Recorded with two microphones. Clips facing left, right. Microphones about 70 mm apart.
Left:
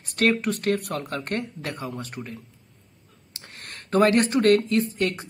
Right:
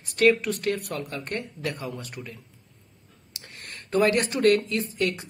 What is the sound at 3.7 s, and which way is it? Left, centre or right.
Speech, left.